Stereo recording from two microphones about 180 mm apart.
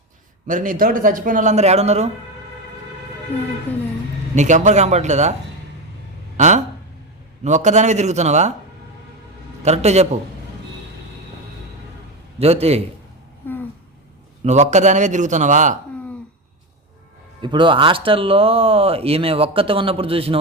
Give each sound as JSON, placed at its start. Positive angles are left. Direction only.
{"t": 0.4, "sound": "speech", "side_deg": -50}
{"t": 3.7, "sound": "speech", "side_deg": 10}
{"t": 4.4, "sound": "speech", "side_deg": -40}
{"t": 6.3, "sound": "speech", "side_deg": -40}
{"t": 9.6, "sound": "speech", "side_deg": -35}
{"t": 12.4, "sound": "speech", "side_deg": -35}
{"t": 13.4, "sound": "a sound", "side_deg": 10}
{"t": 14.4, "sound": "speech", "side_deg": -40}
{"t": 17.4, "sound": "speech", "side_deg": -25}